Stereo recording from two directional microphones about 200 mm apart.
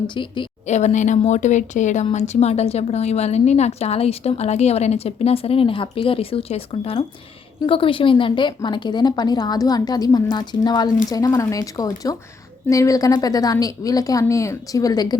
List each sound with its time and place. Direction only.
0.1 s a woman's voice: 25° left (ahead or behind)